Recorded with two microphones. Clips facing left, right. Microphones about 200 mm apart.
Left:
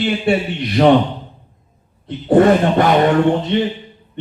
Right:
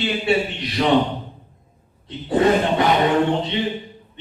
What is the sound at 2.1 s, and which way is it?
Speech, 55° left (ahead or behind).